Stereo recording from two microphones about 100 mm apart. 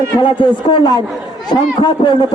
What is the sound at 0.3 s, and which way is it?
A man's voice, 50° left (ahead or behind).